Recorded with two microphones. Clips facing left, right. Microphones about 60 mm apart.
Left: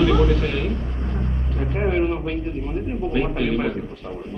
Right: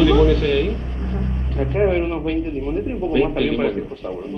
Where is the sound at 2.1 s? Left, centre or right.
Centre.